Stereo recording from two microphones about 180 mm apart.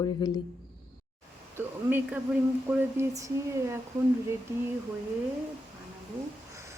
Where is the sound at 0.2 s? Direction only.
20° left (ahead or behind).